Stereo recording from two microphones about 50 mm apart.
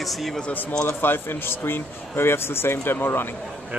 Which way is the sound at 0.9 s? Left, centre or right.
Left.